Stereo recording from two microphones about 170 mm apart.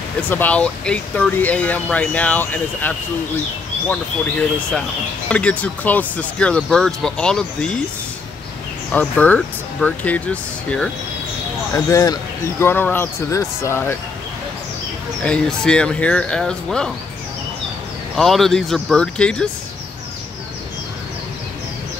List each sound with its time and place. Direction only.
0.3 s speech: 10° left (ahead or behind)
8.9 s speech: 10° left (ahead or behind)
11.7 s speech: 20° left (ahead or behind)
15.2 s speech: 5° left (ahead or behind)
18.1 s speech: centre (ahead or behind)